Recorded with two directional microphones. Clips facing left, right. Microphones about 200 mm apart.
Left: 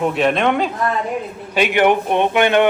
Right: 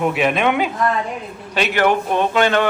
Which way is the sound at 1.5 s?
15° left (ahead or behind).